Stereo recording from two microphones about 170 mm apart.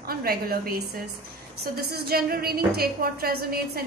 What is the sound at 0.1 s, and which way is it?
A woman's voice, 60° right (ahead or behind).